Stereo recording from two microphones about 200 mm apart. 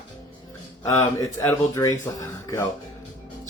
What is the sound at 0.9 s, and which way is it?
Speech, 15° left (ahead or behind).